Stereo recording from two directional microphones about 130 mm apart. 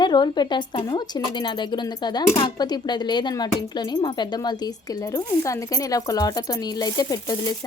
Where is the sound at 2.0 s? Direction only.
35° left (ahead or behind).